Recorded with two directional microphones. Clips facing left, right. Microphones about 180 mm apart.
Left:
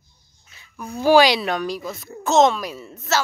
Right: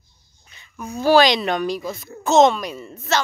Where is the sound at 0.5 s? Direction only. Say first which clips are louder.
Right 1 dB; 5° left (ahead or behind).